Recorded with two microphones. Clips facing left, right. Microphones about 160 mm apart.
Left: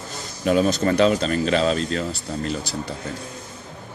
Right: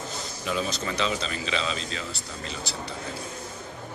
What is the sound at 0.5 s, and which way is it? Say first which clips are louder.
Speech: left 11 dB; 50° left (ahead or behind).